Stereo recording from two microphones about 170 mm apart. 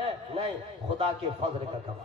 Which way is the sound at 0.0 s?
35° right (ahead or behind).